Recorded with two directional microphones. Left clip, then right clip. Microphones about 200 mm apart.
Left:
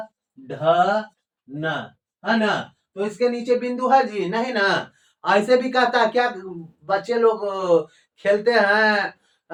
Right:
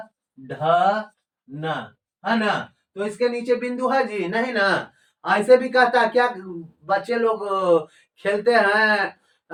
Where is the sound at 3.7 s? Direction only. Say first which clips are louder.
Left 4 dB; centre (ahead or behind).